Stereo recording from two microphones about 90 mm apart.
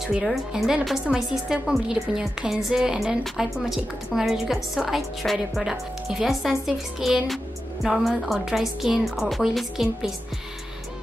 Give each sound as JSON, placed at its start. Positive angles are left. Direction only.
{"t": 0.0, "sound": "a woman's voice", "side_deg": 0}